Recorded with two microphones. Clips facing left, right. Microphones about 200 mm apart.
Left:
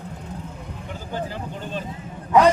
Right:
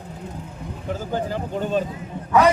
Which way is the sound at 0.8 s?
45° right (ahead or behind).